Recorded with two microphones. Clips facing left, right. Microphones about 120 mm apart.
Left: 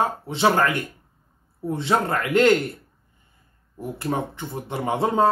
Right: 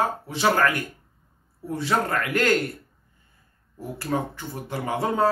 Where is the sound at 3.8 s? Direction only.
20° left (ahead or behind).